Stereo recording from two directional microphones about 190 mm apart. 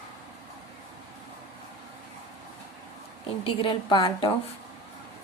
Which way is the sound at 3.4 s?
25° left (ahead or behind).